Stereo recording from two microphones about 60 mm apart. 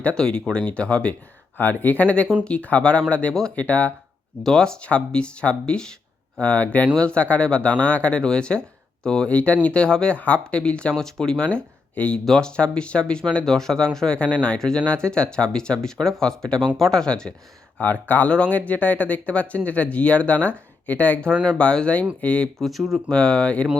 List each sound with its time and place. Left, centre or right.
0.0 s speech: centre
1.5 s speech: left
4.4 s speech: centre
11.4 s speech: left
17.7 s speech: left
22.5 s speech: centre
23.0 s speech: centre